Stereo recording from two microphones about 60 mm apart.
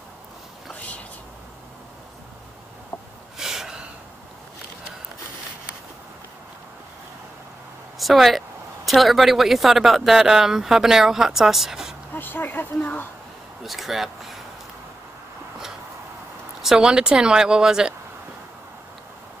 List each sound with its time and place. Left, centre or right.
3.3 s gasp: centre
8.0 s speech: centre
12.2 s speech: left
13.7 s speech: centre
16.6 s speech: centre